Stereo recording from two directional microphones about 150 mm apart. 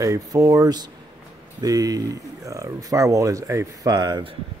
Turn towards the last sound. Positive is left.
turn(degrees=-30)  # may be behind; listen again after turning